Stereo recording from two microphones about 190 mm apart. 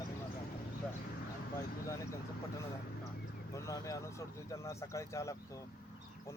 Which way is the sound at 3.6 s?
15° left (ahead or behind).